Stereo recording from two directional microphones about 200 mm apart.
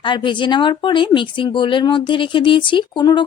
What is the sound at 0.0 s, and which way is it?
Speech, 25° left (ahead or behind).